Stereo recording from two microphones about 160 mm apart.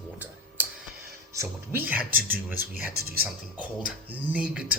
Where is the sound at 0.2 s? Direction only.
10° right (ahead or behind).